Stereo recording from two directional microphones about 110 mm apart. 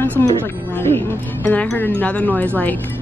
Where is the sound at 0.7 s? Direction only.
20° left (ahead or behind).